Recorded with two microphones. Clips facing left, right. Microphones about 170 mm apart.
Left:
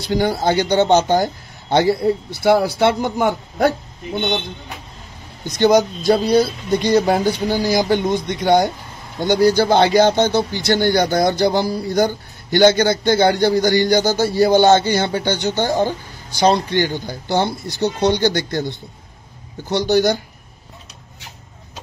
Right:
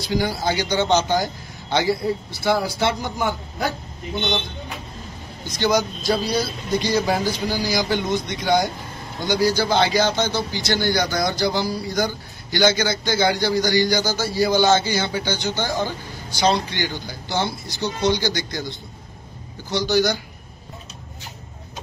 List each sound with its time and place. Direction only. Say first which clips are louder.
0.0 s speech: left 5 dB; 55° left (ahead or behind)
5.6 s speech: left 7 dB; 55° left (ahead or behind)
16.3 s speech: left 5 dB; 45° left (ahead or behind)
19.7 s speech: left 4 dB; 55° left (ahead or behind)